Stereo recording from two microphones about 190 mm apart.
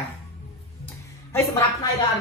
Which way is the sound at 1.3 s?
10° left (ahead or behind).